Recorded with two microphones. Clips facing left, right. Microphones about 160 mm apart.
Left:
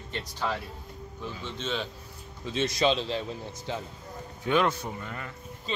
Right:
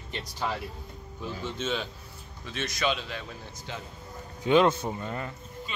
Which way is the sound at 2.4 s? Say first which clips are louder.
Left 4 dB; 25° left (ahead or behind).